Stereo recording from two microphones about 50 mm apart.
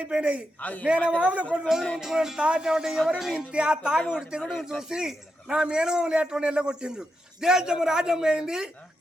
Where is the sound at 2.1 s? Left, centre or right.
Centre.